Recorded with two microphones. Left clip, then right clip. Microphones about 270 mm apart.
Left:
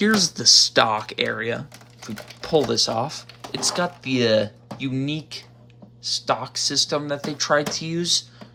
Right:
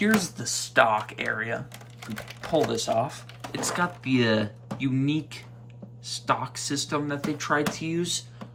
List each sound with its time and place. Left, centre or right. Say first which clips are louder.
0.0 s speech: left 7 dB; centre